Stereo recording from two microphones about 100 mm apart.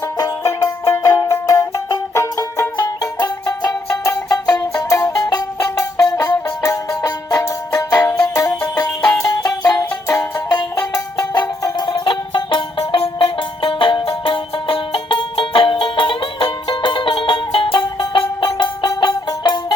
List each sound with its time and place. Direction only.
0.4 s music: 25° left (ahead or behind)
8.0 s music: 30° left (ahead or behind)
11.8 s music: 45° left (ahead or behind)
12.8 s music: 70° left (ahead or behind)
13.1 s music: 60° left (ahead or behind)